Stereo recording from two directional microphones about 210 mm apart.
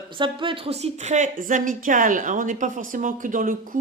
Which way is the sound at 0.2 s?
25° right (ahead or behind).